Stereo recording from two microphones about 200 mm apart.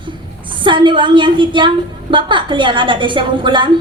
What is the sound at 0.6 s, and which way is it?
A woman's voice, 25° right (ahead or behind).